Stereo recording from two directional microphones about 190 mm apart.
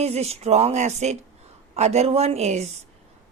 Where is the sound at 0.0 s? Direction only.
35° right (ahead or behind).